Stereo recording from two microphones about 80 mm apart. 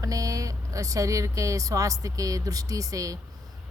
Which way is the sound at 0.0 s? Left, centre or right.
Right.